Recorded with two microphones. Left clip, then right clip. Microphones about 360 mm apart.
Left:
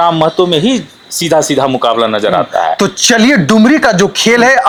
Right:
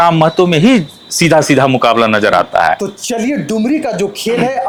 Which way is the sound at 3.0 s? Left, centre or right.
Left.